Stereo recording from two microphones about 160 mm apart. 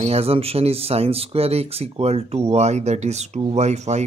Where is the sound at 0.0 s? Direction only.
40° right (ahead or behind).